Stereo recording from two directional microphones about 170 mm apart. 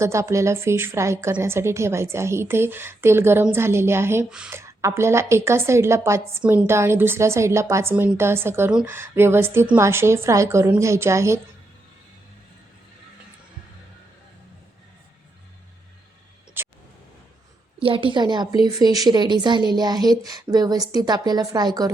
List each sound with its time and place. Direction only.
0.0 s a woman's voice: 15° right (ahead or behind)
4.6 s a woman's voice: 15° right (ahead or behind)
16.6 s a sound: 15° right (ahead or behind)
17.8 s speech: 30° right (ahead or behind)